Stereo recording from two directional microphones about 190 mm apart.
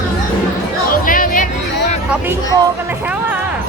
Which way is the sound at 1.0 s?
45° left (ahead or behind).